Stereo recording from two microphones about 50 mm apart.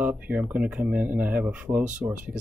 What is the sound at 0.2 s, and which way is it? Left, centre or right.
Speech, right.